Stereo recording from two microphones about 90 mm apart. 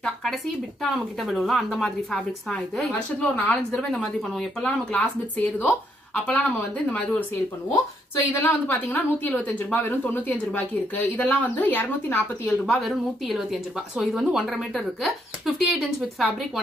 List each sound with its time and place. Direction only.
0.0 s a sound: 5° left (ahead or behind)
0.8 s speech: centre (ahead or behind)
2.8 s speech: 15° left (ahead or behind)
3.9 s a woman's voice: 5° left (ahead or behind)
8.4 s a woman's voice: 20° left (ahead or behind)
12.6 s speech: centre (ahead or behind)